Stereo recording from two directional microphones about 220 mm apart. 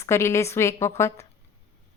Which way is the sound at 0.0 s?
10° left (ahead or behind).